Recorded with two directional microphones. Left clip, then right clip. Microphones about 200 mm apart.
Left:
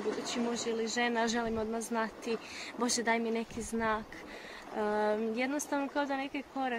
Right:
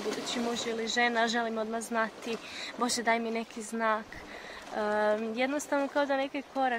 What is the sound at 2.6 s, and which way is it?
Speech, centre (ahead or behind).